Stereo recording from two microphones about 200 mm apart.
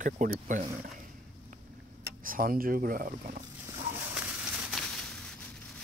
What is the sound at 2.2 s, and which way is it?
Speech, 45° right (ahead or behind).